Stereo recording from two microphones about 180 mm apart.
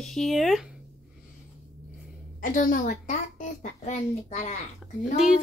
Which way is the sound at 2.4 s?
50° left (ahead or behind).